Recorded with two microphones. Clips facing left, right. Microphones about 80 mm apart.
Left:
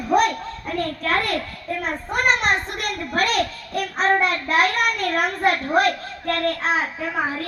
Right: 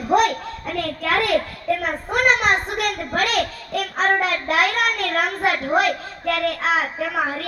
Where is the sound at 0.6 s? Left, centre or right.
Right.